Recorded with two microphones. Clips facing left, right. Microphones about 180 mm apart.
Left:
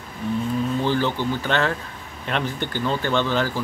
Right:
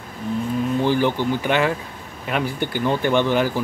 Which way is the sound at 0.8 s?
15° right (ahead or behind).